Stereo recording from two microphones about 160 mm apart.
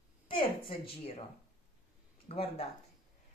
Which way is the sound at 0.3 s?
35° left (ahead or behind).